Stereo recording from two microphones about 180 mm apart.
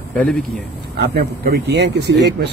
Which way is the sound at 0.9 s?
65° right (ahead or behind).